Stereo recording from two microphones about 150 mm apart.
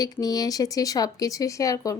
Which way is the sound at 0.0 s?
25° left (ahead or behind).